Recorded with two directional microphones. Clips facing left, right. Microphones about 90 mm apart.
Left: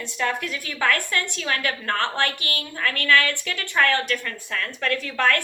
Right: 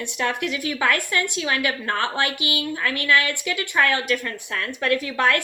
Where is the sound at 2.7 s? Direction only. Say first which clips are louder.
Left 1 dB; 15° right (ahead or behind).